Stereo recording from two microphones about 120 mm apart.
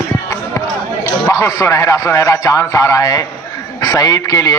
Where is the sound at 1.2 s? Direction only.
25° left (ahead or behind).